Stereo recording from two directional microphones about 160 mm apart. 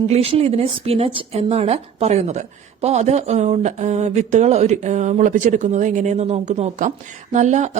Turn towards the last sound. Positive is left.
turn(degrees=-45)  # may be behind; listen again after turning